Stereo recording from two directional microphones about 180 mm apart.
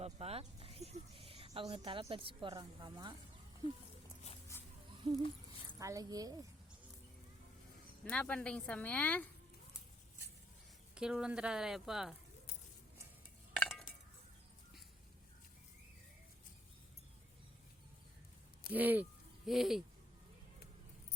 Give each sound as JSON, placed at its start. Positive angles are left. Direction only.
{"t": 0.0, "sound": "a sound", "side_deg": -35}
{"t": 5.6, "sound": "a woman's voice", "side_deg": -20}
{"t": 8.1, "sound": "speech", "side_deg": 5}
{"t": 10.9, "sound": "speech", "side_deg": -5}
{"t": 13.6, "sound": "cutlery", "side_deg": 0}
{"t": 18.7, "sound": "speech", "side_deg": -10}